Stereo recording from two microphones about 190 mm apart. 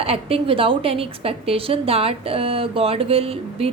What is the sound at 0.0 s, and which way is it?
A woman's voice, 30° right (ahead or behind).